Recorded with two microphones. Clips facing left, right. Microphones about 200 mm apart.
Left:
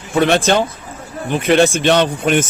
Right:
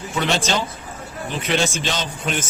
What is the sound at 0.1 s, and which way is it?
A man's voice, 55° left (ahead or behind).